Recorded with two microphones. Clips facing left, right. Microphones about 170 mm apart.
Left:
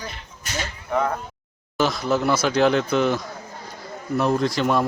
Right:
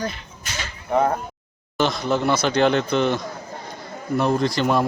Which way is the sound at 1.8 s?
5° left (ahead or behind).